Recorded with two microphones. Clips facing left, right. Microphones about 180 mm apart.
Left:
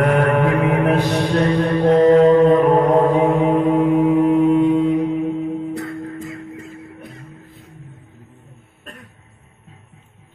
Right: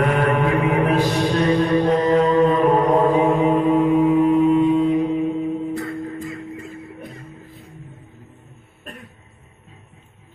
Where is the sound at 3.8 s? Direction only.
60° left (ahead or behind).